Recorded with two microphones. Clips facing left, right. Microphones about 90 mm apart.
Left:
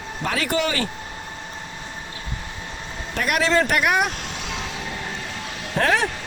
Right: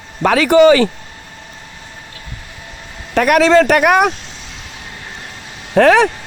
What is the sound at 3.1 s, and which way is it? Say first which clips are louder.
Speech: right 10 dB; 90° right.